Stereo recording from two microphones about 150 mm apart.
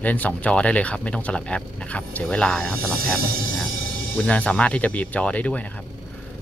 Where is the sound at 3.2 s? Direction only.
85° right.